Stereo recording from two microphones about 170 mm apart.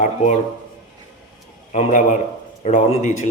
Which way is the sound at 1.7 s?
45° left (ahead or behind).